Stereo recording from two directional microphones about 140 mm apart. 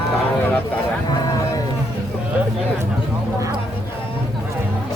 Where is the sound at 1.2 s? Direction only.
25° left (ahead or behind).